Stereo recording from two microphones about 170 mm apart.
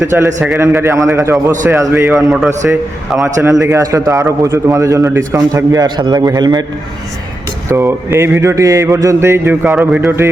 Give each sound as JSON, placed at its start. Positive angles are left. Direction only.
{"t": 0.0, "sound": "speech", "side_deg": -15}
{"t": 2.1, "sound": "a man's voice", "side_deg": 0}
{"t": 3.6, "sound": "a man's voice", "side_deg": -20}
{"t": 7.7, "sound": "speech", "side_deg": -15}